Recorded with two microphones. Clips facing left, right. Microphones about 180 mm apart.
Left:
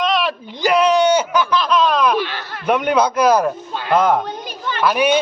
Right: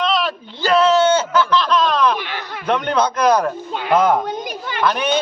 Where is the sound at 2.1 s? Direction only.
15° right (ahead or behind).